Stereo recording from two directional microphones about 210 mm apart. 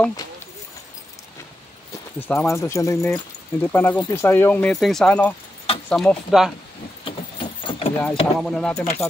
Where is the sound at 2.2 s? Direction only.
10° left (ahead or behind).